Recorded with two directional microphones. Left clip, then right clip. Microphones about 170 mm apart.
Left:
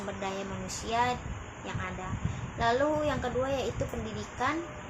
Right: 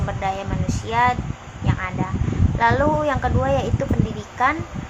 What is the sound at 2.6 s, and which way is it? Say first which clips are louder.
Speech: right 9 dB; 10° right (ahead or behind).